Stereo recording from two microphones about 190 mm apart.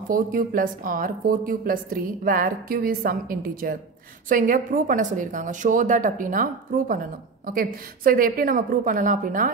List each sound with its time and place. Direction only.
0.1 s a woman's voice: 45° right (ahead or behind)